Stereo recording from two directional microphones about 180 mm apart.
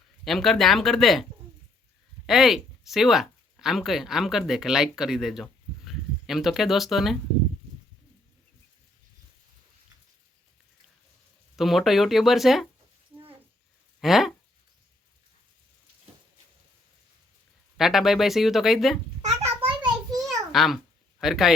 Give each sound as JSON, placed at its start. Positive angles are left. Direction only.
{"t": 0.3, "sound": "speech", "side_deg": 0}
{"t": 11.5, "sound": "speech", "side_deg": 0}
{"t": 14.0, "sound": "speech", "side_deg": 0}
{"t": 17.7, "sound": "speech", "side_deg": 0}
{"t": 19.6, "sound": "a sound", "side_deg": -25}
{"t": 20.2, "sound": "babbling", "side_deg": 0}
{"t": 21.2, "sound": "speech", "side_deg": 0}